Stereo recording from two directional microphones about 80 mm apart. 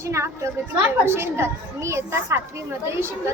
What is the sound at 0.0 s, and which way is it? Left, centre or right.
A woman's voice, right.